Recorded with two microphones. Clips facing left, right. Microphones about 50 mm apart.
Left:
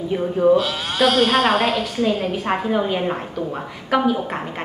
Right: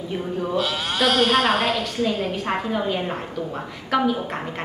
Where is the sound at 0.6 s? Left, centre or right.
Centre.